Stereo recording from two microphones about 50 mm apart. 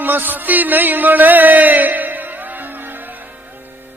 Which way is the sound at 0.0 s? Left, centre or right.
Right.